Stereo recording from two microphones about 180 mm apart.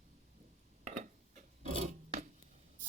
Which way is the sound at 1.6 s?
40° right (ahead or behind).